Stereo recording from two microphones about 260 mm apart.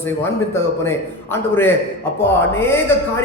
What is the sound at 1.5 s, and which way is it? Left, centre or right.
Speech, centre.